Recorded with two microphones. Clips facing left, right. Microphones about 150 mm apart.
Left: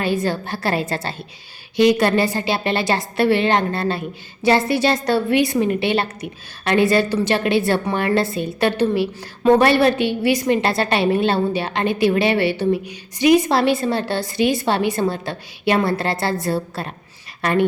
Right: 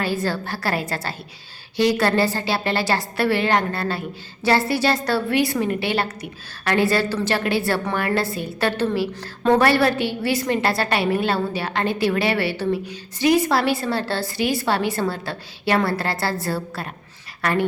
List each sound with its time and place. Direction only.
0.0 s a woman's voice: 20° left (ahead or behind)